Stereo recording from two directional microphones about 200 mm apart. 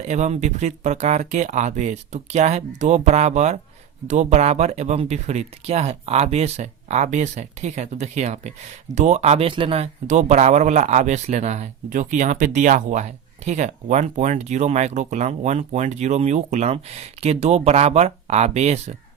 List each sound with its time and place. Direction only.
0.0 s speech: 35° right (ahead or behind)